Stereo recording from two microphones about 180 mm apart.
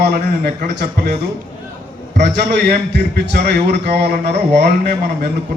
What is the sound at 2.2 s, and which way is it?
A man's voice, 70° right (ahead or behind).